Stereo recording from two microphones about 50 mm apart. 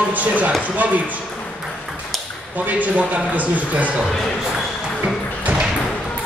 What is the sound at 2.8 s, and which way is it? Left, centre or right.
Speech, right.